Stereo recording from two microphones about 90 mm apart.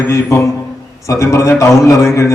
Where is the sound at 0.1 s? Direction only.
35° left (ahead or behind).